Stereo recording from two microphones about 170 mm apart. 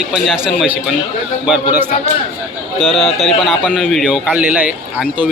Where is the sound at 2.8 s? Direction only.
35° left (ahead or behind).